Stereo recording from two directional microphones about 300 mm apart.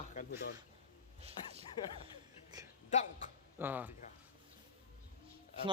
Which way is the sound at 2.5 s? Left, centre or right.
Centre.